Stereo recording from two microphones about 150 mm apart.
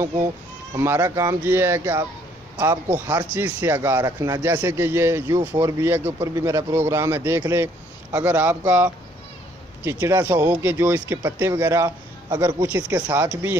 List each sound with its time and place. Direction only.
0.7 s speech: 15° right (ahead or behind)